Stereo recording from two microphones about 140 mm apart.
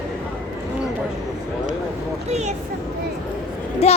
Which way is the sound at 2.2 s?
55° right (ahead or behind).